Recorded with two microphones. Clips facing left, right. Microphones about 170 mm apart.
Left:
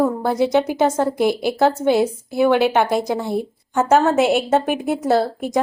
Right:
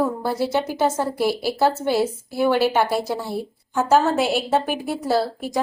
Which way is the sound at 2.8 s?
5° right (ahead or behind).